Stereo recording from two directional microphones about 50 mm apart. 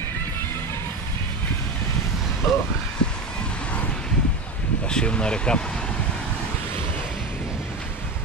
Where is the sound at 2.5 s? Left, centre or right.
Centre.